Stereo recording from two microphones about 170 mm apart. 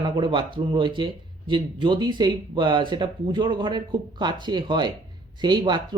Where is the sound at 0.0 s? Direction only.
30° right (ahead or behind).